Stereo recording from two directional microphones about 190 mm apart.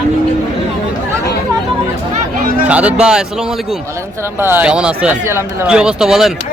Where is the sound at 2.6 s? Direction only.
5° right (ahead or behind).